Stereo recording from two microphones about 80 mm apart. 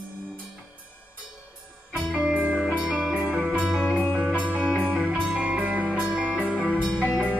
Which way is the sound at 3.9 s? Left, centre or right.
Left.